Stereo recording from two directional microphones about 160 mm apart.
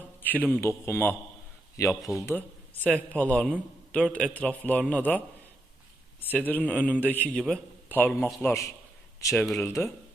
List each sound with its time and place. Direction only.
0.2 s a man's voice: 10° left (ahead or behind)
6.2 s a man's voice: 10° left (ahead or behind)
9.3 s speech: 5° left (ahead or behind)
9.6 s a man's voice: 15° left (ahead or behind)